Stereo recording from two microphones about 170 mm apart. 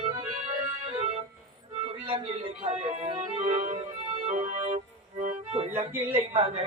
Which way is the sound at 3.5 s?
40° right (ahead or behind).